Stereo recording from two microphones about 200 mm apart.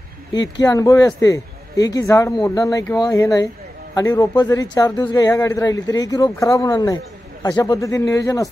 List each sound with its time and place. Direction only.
0.6 s speech: 15° left (ahead or behind)